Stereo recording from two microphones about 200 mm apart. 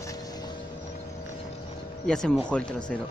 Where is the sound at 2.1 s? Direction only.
5° left (ahead or behind).